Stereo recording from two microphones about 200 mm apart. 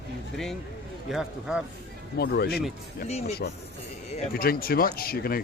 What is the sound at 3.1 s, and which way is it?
Speech, 30° left (ahead or behind).